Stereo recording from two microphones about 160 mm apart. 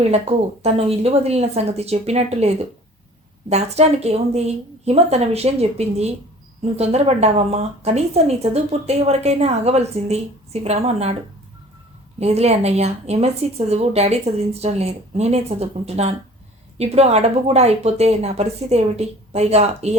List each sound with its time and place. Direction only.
0.0 s speech: 40° right (ahead or behind)
12.2 s speech: 40° right (ahead or behind)